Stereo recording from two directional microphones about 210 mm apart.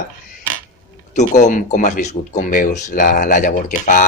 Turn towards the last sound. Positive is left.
turn(degrees=40)  # may be behind; listen again after turning